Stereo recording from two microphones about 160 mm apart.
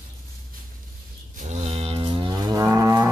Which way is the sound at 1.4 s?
45° right (ahead or behind).